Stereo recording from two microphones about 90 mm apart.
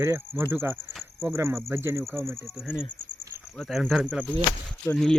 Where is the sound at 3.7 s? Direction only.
5° right (ahead or behind).